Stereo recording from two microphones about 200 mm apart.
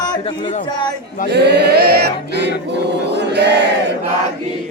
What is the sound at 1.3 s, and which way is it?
Chant, 55° right (ahead or behind).